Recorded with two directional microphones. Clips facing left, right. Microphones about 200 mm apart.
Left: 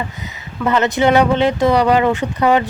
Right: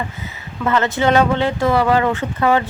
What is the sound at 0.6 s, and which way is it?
Speech, 20° left (ahead or behind).